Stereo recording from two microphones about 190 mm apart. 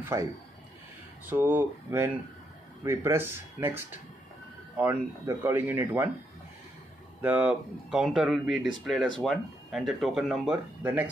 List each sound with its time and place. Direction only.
0.0 s a man's voice: 15° right (ahead or behind)
1.3 s speech: 10° right (ahead or behind)
7.2 s speech: 10° right (ahead or behind)